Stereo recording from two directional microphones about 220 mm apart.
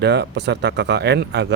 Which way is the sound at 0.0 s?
50° right (ahead or behind).